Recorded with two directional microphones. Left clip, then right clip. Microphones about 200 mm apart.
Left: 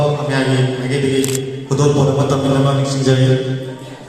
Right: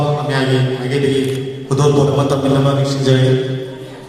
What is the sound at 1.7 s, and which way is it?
Mantra, 30° right (ahead or behind).